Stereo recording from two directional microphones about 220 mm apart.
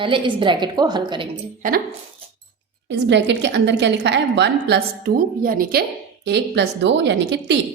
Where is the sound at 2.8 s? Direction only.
50° right (ahead or behind).